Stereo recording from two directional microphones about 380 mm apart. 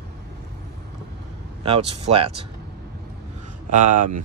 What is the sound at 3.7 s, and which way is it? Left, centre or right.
Speech, centre.